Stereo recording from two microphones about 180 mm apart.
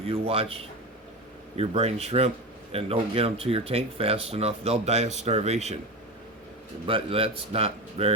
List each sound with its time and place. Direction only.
0.1 s speech: 30° right (ahead or behind)
6.8 s speech: 30° right (ahead or behind)